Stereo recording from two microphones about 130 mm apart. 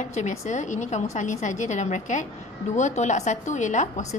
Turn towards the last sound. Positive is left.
turn(degrees=70)  # may be behind; listen again after turning